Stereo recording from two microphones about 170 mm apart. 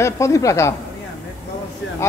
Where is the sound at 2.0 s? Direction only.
15° left (ahead or behind).